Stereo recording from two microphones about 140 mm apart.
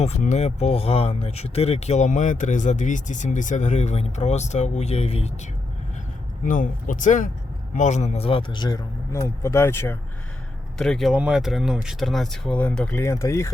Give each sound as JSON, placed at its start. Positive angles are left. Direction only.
{"t": 0.0, "sound": "speech", "side_deg": 55}
{"t": 6.4, "sound": "a man's voice", "side_deg": 70}
{"t": 10.8, "sound": "speech", "side_deg": 5}